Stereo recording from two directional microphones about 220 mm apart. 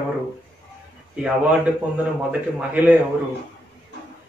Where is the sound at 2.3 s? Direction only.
5° right (ahead or behind).